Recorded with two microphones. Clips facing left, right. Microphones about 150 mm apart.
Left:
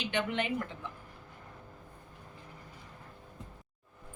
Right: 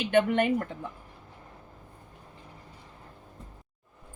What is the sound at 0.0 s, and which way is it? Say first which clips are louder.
Speech: right 9 dB; 50° right (ahead or behind).